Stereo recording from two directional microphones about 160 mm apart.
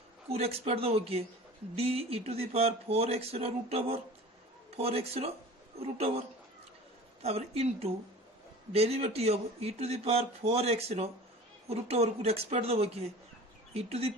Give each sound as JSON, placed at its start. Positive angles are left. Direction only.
{"t": 0.3, "sound": "speech", "side_deg": -40}